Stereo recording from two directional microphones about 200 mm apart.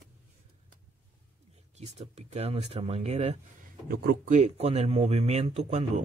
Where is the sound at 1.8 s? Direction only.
35° right (ahead or behind).